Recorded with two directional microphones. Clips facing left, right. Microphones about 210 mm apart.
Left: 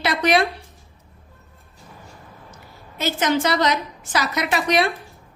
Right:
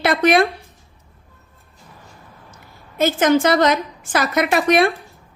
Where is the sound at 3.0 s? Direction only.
50° right (ahead or behind).